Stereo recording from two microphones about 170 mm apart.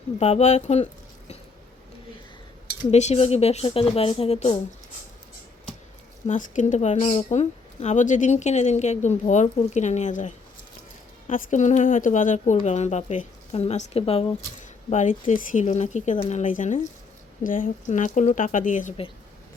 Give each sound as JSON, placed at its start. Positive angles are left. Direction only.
{"t": 0.2, "sound": "a woman's voice", "side_deg": 40}
{"t": 2.9, "sound": "a woman's voice", "side_deg": 40}
{"t": 6.2, "sound": "a woman's voice", "side_deg": 45}
{"t": 14.8, "sound": "speech", "side_deg": 45}